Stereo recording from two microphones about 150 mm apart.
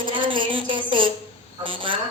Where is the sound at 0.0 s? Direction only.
35° right (ahead or behind).